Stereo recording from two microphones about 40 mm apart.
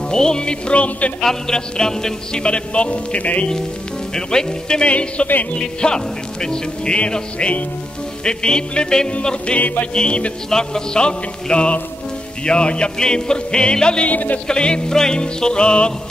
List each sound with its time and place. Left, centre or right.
0.1 s music: centre; by 3.4 s left
4.1 s music: centre
4.8 s a man's voice: left
5.6 s music: centre
10.5 s music: centre
14.0 s music: left
14.5 s music: left